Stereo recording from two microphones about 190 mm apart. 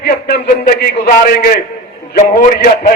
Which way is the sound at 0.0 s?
60° left (ahead or behind).